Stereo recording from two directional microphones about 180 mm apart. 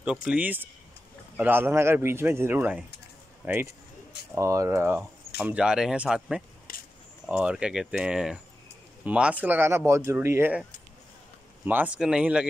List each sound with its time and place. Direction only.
0.0 s speech: 5° right (ahead or behind)
6.7 s a sound: 50° left (ahead or behind)
7.2 s speech: 5° right (ahead or behind)
11.6 s speech: 10° right (ahead or behind)